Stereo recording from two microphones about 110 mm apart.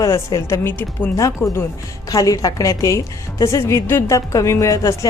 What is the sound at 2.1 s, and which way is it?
A woman's voice, 30° left (ahead or behind).